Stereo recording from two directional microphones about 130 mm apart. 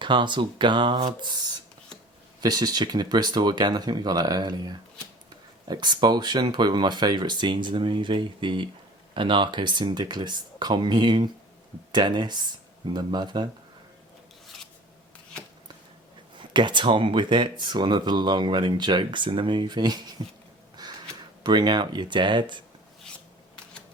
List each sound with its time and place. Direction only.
0.0 s speech: 35° right (ahead or behind)
2.4 s speech: 30° right (ahead or behind)
14.4 s rub: centre (ahead or behind)
16.4 s speech: 35° right (ahead or behind)
20.8 s gasp: 30° right (ahead or behind)
21.4 s speech: 35° right (ahead or behind)